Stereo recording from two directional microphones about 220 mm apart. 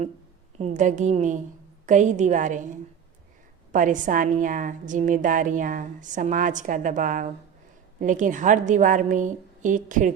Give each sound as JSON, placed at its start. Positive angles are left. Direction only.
{"t": 0.6, "sound": "a woman's voice", "side_deg": -35}